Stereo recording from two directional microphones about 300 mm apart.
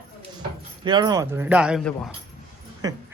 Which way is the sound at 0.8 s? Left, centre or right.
Centre.